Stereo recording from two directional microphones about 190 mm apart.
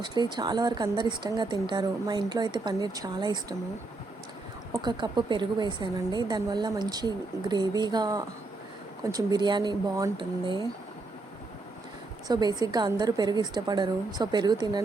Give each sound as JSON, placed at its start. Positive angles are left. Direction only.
{"t": 0.0, "sound": "a woman's voice", "side_deg": -25}
{"t": 4.7, "sound": "a woman's voice", "side_deg": -25}
{"t": 12.3, "sound": "a woman's voice", "side_deg": -20}